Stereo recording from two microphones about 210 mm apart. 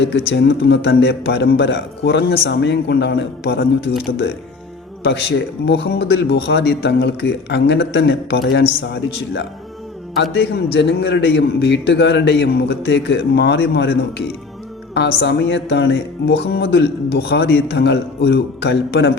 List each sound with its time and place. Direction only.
0.3 s a man's voice: 55° left (ahead or behind)
5.6 s a man's voice: 55° left (ahead or behind)
10.8 s a man's voice: 55° left (ahead or behind)